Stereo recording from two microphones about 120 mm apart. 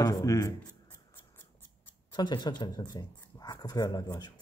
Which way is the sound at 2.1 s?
40° left (ahead or behind).